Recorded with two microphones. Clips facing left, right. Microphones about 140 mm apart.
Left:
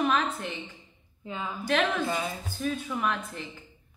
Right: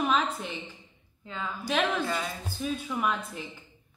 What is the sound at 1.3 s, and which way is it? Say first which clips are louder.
Speech: left 1 dB; 20° left (ahead or behind).